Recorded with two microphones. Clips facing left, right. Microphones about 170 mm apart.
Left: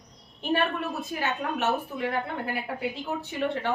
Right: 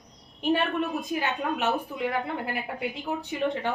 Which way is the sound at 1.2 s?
15° right (ahead or behind).